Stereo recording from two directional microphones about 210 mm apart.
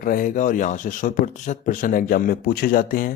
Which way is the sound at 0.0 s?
40° left (ahead or behind).